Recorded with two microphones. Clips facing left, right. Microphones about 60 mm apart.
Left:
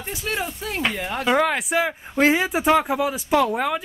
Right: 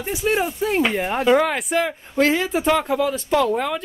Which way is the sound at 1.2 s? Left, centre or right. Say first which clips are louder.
Right 2 dB; centre.